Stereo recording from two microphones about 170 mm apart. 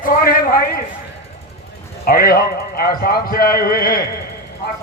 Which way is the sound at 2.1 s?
60° left (ahead or behind).